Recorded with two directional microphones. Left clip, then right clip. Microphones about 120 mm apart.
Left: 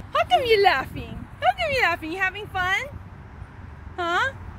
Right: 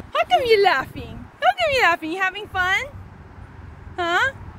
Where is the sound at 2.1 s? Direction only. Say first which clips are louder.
Right 3 dB; 10° right (ahead or behind).